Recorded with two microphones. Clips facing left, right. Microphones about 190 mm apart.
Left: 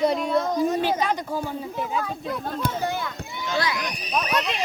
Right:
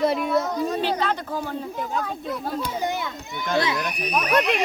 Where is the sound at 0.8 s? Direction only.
15° left (ahead or behind); by 2.5 s centre (ahead or behind).